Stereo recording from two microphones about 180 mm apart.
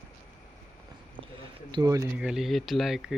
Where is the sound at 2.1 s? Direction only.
5° right (ahead or behind).